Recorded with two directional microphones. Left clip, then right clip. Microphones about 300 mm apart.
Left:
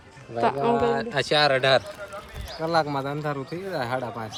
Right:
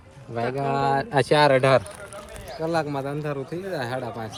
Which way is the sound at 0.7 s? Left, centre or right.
Right.